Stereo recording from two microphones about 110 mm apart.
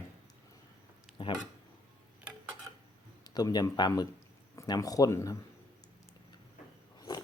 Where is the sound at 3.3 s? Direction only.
35° left (ahead or behind).